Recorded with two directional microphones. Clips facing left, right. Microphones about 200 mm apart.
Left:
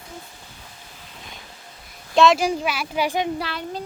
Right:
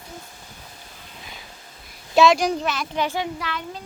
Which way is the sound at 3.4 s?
35° left (ahead or behind).